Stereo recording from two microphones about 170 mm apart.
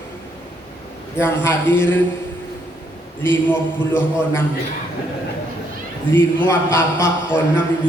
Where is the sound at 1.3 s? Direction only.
15° left (ahead or behind).